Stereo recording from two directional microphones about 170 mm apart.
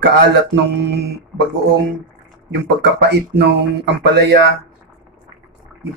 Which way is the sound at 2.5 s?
80° right.